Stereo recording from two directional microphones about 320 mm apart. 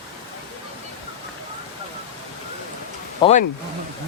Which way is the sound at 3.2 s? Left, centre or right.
Centre.